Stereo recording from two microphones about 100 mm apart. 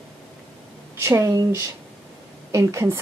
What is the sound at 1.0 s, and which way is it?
Speech, 30° right (ahead or behind).